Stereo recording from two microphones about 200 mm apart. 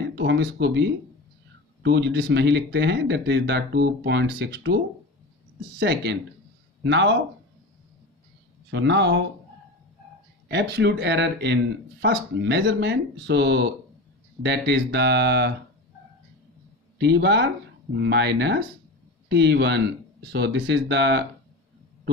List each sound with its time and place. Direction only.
0.1 s speech: 60° right (ahead or behind)
5.8 s speech: 60° right (ahead or behind)
8.6 s speech: 60° right (ahead or behind)
10.5 s speech: 60° right (ahead or behind)
17.0 s speech: 60° right (ahead or behind)